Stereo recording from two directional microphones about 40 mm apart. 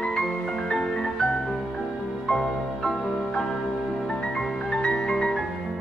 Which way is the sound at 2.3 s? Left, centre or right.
Centre.